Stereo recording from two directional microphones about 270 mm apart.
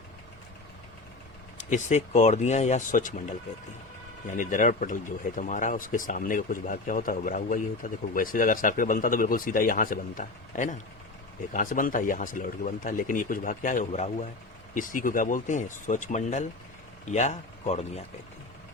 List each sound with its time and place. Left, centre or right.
1.5 s speech: left